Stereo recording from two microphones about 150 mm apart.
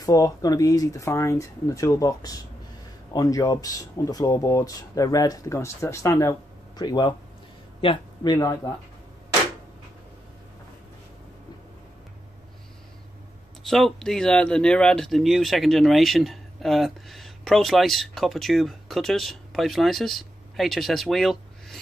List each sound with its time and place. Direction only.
0.0 s speech: 25° left (ahead or behind)
13.7 s speech: centre (ahead or behind)